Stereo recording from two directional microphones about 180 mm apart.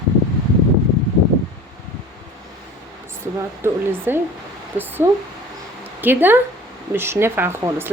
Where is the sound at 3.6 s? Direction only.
10° right (ahead or behind).